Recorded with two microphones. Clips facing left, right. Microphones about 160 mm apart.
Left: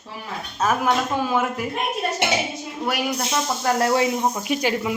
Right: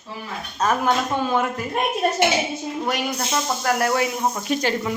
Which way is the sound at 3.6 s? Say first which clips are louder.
Left 2 dB; 25° left (ahead or behind).